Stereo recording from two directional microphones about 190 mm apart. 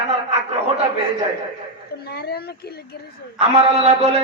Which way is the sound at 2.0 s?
55° left (ahead or behind).